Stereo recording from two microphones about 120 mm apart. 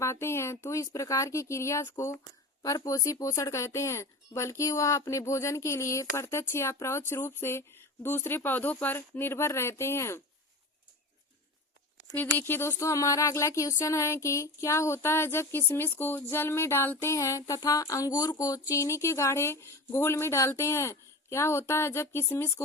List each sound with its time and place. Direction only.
0.0 s speech: 20° left (ahead or behind)
12.1 s speech: 15° left (ahead or behind)